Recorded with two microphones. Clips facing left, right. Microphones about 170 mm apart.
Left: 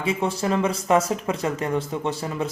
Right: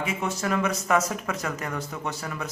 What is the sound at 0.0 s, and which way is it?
Speech, 30° left (ahead or behind).